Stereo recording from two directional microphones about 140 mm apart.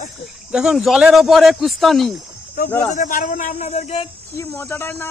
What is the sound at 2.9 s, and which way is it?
A man's voice, 70° left (ahead or behind).